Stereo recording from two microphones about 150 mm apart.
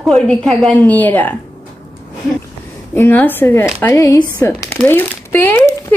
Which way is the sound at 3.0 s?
15° left (ahead or behind).